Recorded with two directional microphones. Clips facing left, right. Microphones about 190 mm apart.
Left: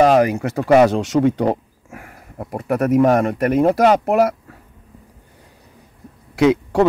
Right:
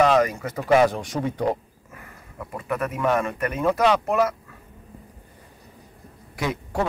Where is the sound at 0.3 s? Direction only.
70° left (ahead or behind).